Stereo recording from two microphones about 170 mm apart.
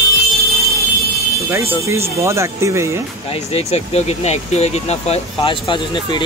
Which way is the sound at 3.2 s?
35° left (ahead or behind).